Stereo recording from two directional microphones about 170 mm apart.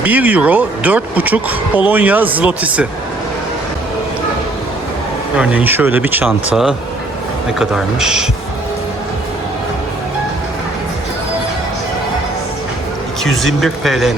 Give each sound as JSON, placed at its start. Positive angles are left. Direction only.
{"t": 0.0, "sound": "speech", "side_deg": -10}
{"t": 5.4, "sound": "speech", "side_deg": -5}
{"t": 13.4, "sound": "speech", "side_deg": 0}